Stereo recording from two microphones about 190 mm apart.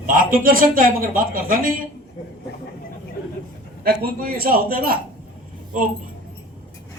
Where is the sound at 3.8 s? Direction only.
50° right (ahead or behind).